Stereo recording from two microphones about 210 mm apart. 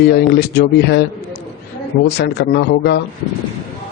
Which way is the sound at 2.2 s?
50° left (ahead or behind).